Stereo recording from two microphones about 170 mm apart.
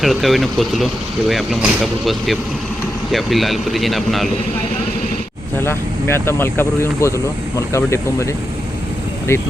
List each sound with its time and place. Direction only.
0.0 s speech: centre (ahead or behind)
5.5 s speech: 15° left (ahead or behind)